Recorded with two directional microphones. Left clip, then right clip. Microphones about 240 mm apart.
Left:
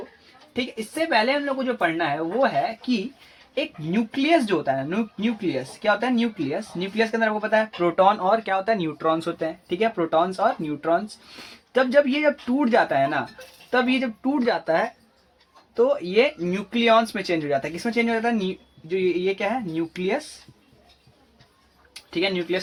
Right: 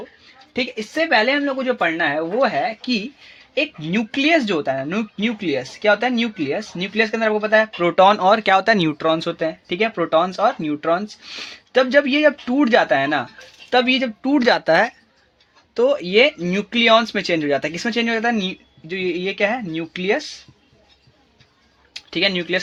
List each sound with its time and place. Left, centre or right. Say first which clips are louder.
1.5 s speech: right 4 dB; right
22.1 s speech: right 5 dB; right